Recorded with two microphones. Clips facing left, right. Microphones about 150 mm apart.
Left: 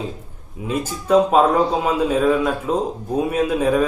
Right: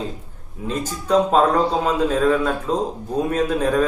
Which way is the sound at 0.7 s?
10° left (ahead or behind).